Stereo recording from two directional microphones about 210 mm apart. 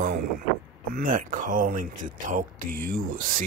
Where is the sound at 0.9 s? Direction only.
40° right (ahead or behind).